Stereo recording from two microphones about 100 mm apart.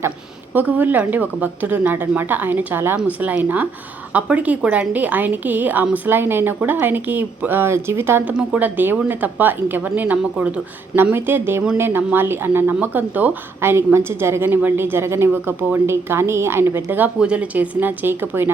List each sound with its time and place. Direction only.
0.5 s a woman's voice: 20° right (ahead or behind)
8.3 s a woman's voice: 10° right (ahead or behind)
17.2 s speech: 10° right (ahead or behind)